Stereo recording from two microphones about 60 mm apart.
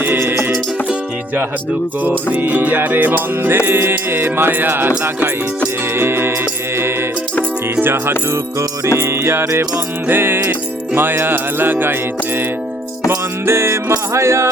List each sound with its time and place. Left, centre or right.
0.0 s music: right
2.0 s music: right
7.8 s music: right
10.1 s music: right
13.1 s music: right